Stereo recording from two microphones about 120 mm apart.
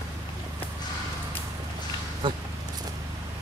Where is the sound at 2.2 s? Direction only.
40° right (ahead or behind).